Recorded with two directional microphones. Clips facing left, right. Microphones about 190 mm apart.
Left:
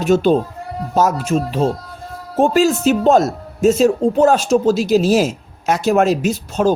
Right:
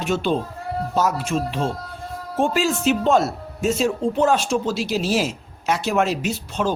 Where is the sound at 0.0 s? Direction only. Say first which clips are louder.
Left 8 dB; 40° left (ahead or behind).